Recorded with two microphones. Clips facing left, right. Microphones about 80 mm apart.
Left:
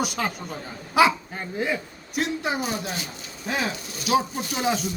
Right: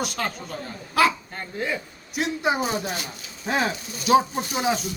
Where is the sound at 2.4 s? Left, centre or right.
Right.